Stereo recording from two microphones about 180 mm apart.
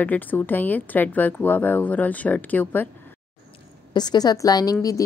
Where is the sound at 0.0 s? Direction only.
10° left (ahead or behind).